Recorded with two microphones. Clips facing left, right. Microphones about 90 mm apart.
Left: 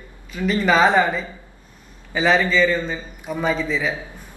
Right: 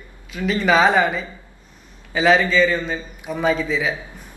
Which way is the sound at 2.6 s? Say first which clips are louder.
Right 1 dB; 15° right (ahead or behind).